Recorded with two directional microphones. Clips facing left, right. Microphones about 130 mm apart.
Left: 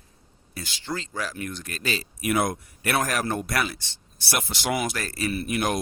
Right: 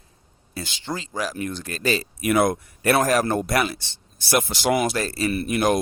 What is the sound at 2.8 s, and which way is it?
Speech, 40° right (ahead or behind).